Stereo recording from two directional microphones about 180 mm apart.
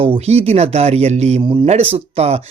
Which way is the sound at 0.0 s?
35° right (ahead or behind).